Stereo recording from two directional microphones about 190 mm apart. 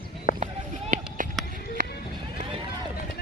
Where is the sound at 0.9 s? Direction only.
45° right (ahead or behind).